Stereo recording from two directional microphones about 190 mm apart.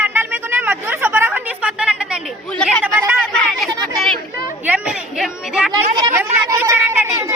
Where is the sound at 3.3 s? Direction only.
Centre (ahead or behind).